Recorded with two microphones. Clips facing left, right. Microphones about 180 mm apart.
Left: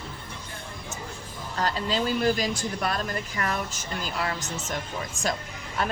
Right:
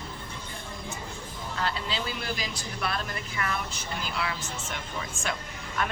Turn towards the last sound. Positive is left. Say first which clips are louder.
# left 3 dB
turn(degrees=35)  # may be behind; listen again after turning